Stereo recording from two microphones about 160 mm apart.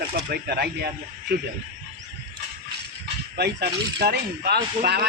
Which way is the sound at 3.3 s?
90° right.